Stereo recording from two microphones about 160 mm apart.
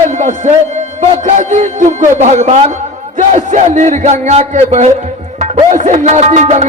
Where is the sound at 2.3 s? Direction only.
45° right (ahead or behind).